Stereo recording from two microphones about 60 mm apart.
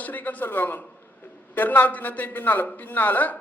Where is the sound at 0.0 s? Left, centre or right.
Left.